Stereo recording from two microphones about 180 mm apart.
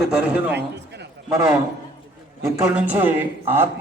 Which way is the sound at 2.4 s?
10° right (ahead or behind).